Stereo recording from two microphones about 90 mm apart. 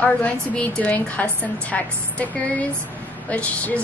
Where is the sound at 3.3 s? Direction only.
15° left (ahead or behind).